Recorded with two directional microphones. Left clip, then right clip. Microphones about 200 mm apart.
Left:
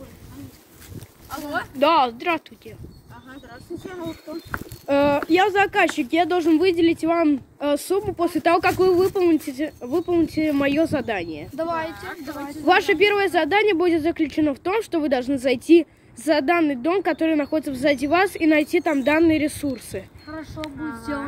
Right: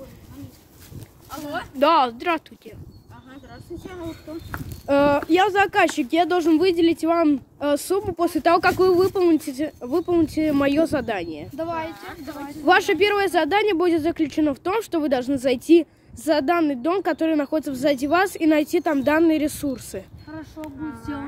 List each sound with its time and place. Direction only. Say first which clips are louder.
1.8 s speech: even; 30° right (ahead or behind)
4.8 s speech: right 1 dB; 25° right (ahead or behind)
11.5 s speech: left 3 dB; 20° left (ahead or behind)
12.6 s speech: even; 25° right (ahead or behind)
20.2 s speech: left 3 dB; 15° left (ahead or behind)
20.8 s speech: even; centre (ahead or behind)